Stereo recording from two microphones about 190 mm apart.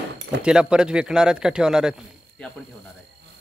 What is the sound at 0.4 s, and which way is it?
A man's voice, 5° right (ahead or behind).